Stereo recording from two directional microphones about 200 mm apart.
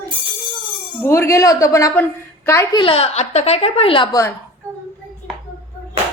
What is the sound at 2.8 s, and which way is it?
A woman's voice, 30° left (ahead or behind).